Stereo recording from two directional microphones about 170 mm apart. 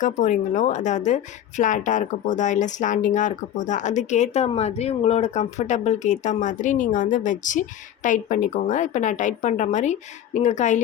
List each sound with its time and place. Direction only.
0.0 s speech: 45° left (ahead or behind)